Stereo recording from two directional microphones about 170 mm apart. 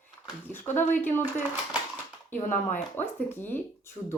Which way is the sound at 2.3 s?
50° left (ahead or behind).